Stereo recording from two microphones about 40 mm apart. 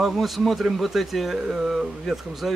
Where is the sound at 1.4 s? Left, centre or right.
Centre.